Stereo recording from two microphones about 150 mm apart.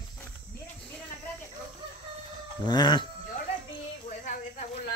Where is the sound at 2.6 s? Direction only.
30° left (ahead or behind).